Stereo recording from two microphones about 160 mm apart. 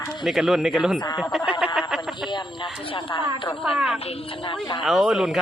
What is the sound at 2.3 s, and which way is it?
Speech, 30° left (ahead or behind).